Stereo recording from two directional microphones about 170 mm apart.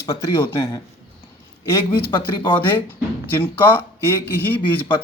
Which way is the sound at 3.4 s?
10° left (ahead or behind).